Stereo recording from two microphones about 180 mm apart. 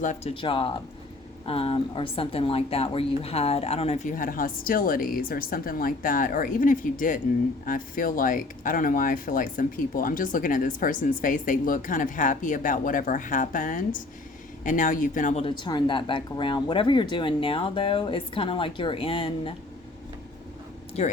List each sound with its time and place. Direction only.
0.0 s speech: 40° left (ahead or behind)
0.4 s speech: 30° left (ahead or behind)
21.0 s speech: 40° left (ahead or behind)